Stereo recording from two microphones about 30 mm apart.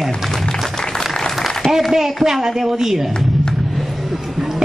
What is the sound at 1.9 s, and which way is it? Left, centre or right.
A woman's voice, centre.